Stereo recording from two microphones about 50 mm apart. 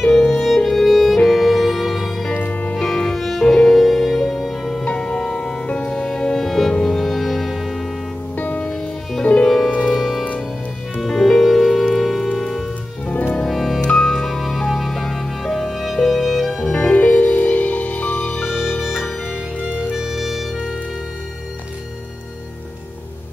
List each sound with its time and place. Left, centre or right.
0.0 s music: centre
0.4 s music: centre
2.3 s music: left
3.0 s music: centre
5.7 s music: left
5.9 s music: centre
8.4 s music: left
9.4 s music: centre
11.1 s music: centre
13.0 s music: left
13.5 s music: centre
16.7 s music: left
20.0 s music: centre